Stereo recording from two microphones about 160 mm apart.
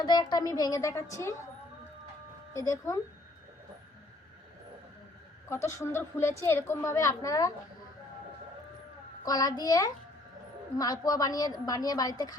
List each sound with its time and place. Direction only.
0.0 s a woman's voice: 25° left (ahead or behind)
2.6 s a woman's voice: 20° left (ahead or behind)
5.5 s a woman's voice: 15° left (ahead or behind)
9.2 s a woman's voice: 20° left (ahead or behind)